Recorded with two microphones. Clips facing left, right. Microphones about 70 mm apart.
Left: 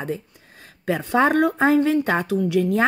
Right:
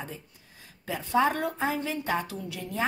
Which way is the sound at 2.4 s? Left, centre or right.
Left.